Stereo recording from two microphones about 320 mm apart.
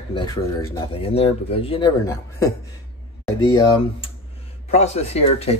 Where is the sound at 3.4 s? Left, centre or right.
Centre.